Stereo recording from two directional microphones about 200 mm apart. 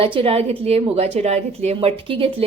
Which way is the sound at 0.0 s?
25° right (ahead or behind).